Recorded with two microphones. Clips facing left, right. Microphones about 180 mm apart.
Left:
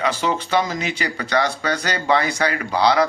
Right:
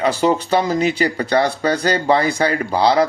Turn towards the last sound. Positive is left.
turn(degrees=-30)  # may be behind; listen again after turning